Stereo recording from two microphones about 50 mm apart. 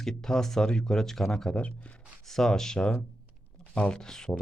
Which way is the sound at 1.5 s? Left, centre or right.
Left.